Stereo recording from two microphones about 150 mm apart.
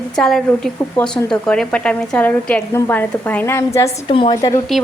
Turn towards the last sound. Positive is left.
turn(degrees=25)  # may be behind; listen again after turning